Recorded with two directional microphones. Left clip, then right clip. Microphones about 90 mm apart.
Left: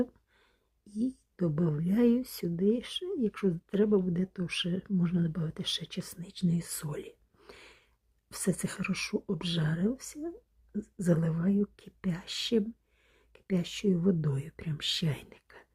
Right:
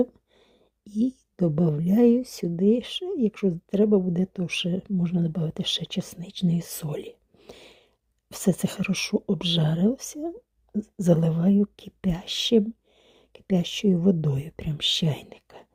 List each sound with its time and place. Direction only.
0.9 s speech: 30° right (ahead or behind); by 2.4 s 10° right (ahead or behind)
2.4 s speech: 20° right (ahead or behind)
3.3 s speech: 5° right (ahead or behind)
4.1 s speech: 20° right (ahead or behind)
7.5 s a sound: 15° right (ahead or behind)
8.3 s speech: 20° right (ahead or behind)